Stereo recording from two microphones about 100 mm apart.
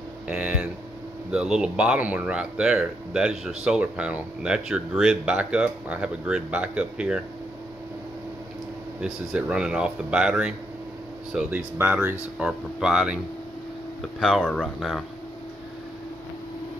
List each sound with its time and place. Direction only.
0.3 s a sound: 10° right (ahead or behind)
1.3 s speech: 5° right (ahead or behind)
9.0 s speech: 5° right (ahead or behind)
11.5 s speech: 15° right (ahead or behind)
12.4 s speech: 5° right (ahead or behind)
14.2 s speech: 5° left (ahead or behind)